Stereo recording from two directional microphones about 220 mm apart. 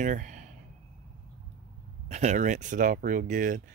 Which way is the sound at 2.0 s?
30° right (ahead or behind).